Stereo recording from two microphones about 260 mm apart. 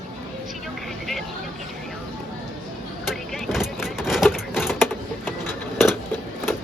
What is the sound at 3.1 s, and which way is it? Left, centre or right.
Vehicle, centre.